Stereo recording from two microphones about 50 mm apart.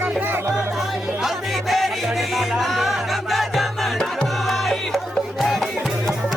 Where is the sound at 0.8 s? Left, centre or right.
Centre.